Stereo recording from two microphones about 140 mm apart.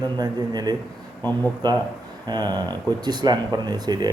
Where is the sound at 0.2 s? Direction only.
30° right (ahead or behind).